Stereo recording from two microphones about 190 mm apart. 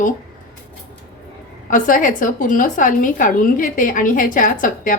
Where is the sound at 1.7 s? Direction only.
45° left (ahead or behind).